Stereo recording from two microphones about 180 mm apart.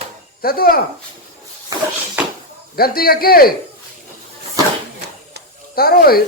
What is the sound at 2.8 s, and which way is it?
Speech, 55° left (ahead or behind).